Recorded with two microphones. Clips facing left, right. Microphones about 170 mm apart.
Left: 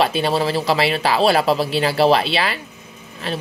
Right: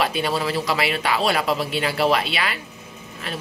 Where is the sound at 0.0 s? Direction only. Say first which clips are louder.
Left 4 dB; 30° left (ahead or behind).